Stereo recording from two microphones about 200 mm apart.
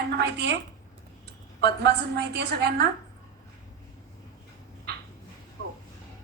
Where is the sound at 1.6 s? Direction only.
55° right (ahead or behind).